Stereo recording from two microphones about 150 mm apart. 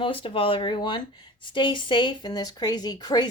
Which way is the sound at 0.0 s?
35° left (ahead or behind).